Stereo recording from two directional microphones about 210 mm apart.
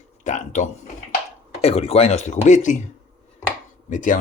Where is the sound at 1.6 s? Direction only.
30° left (ahead or behind).